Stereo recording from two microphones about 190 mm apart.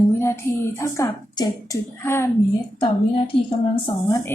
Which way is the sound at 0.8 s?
15° left (ahead or behind).